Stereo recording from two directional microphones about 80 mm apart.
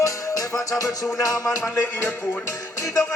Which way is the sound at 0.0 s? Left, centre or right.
Left.